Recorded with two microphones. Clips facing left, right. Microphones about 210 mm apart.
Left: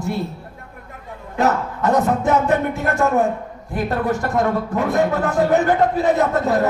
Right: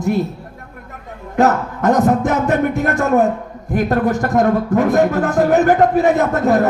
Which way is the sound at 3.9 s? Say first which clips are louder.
Right 4 dB; 45° right (ahead or behind).